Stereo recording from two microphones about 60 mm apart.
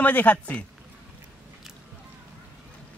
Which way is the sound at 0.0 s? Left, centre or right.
Left.